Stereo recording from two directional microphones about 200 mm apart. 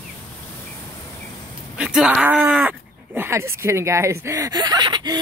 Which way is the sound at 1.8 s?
5° right (ahead or behind).